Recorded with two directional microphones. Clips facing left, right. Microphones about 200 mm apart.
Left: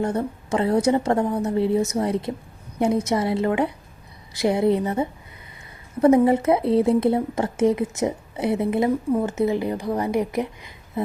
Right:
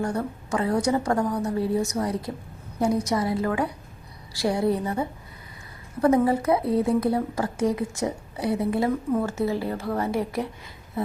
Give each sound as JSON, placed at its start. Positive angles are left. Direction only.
{"t": 0.0, "sound": "speech", "side_deg": 25}